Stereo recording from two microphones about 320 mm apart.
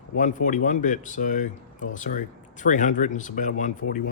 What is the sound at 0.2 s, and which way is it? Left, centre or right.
Speech, left.